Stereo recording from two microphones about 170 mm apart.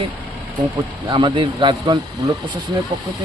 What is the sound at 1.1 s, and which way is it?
Speech, 30° right (ahead or behind).